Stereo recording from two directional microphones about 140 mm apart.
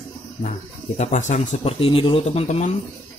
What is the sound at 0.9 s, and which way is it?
Speech, 60° left (ahead or behind).